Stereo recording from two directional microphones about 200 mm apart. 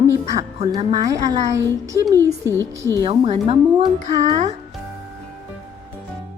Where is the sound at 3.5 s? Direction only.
30° right (ahead or behind).